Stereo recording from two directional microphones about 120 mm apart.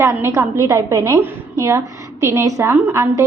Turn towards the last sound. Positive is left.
turn(degrees=-20)  # may be behind; listen again after turning